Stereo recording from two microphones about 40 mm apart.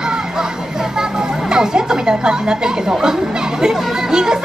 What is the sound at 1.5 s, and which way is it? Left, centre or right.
A child's voice, centre.